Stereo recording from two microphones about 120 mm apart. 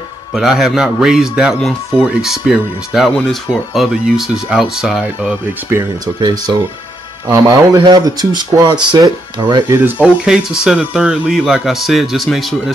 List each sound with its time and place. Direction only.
0.3 s speech: centre (ahead or behind)
5.0 s speech: 20° right (ahead or behind)
7.2 s a man's voice: 30° right (ahead or behind)
9.7 s speech: 15° right (ahead or behind); by 12.7 s centre (ahead or behind)